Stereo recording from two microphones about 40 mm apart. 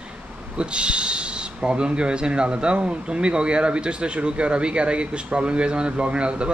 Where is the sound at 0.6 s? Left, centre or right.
Right.